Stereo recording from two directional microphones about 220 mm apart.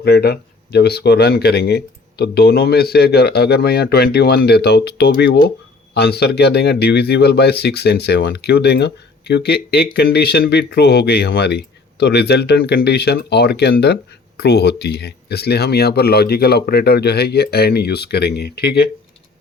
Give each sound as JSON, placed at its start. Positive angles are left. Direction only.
{"t": 0.0, "sound": "speech", "side_deg": 45}